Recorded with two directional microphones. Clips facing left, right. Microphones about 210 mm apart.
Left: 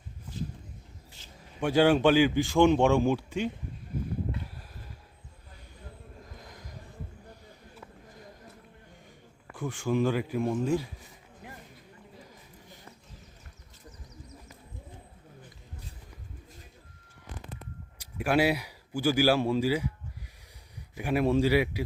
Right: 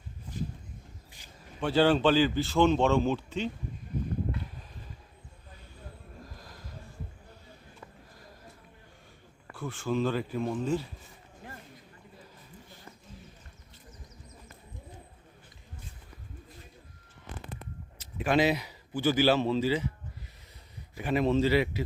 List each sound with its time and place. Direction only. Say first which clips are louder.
1.6 s speech: left 2 dB; 10° left (ahead or behind)
6.3 s a sound: left 1 dB; 20° left (ahead or behind)
9.5 s speech: left 2 dB; 15° left (ahead or behind)
12.2 s a sound: even; 15° left (ahead or behind)
17.9 s speech: even; 10° left (ahead or behind)
20.9 s speech: left 1 dB; 10° left (ahead or behind)